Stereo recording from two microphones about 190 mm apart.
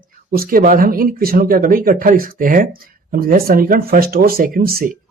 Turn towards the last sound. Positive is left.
turn(degrees=-50)  # may be behind; listen again after turning